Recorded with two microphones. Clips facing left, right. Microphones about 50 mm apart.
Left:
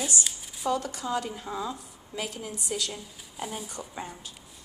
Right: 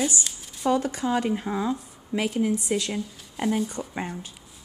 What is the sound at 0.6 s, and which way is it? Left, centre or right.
Speech, right.